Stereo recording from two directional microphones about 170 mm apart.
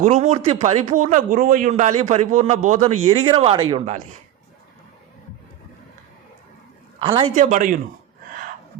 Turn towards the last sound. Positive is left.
turn(degrees=-50)  # may be behind; listen again after turning